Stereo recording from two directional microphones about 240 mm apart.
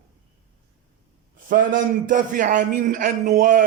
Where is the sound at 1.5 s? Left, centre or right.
Right.